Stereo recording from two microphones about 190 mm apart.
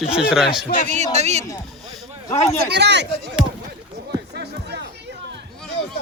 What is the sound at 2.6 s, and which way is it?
Speech, 65° right (ahead or behind).